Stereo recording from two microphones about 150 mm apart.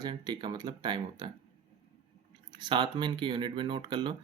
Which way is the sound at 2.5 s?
30° right (ahead or behind).